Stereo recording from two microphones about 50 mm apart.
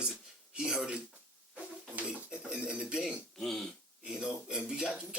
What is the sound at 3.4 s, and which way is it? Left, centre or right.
Speech, centre.